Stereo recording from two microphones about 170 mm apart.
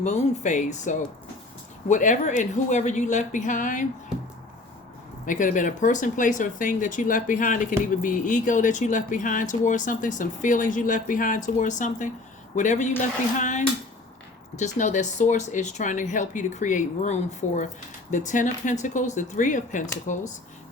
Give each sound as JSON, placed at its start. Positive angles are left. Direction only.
{"t": 0.0, "sound": "speech", "side_deg": 40}
{"t": 5.2, "sound": "speech", "side_deg": 50}